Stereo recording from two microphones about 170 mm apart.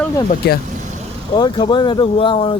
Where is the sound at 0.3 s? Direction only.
65° left (ahead or behind).